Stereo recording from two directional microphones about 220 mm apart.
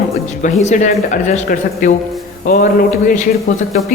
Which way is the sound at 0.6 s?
35° left (ahead or behind).